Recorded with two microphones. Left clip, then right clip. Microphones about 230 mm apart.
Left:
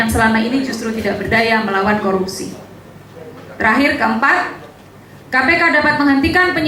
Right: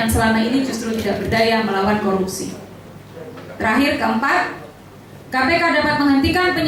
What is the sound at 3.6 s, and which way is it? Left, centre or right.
A woman's voice, centre.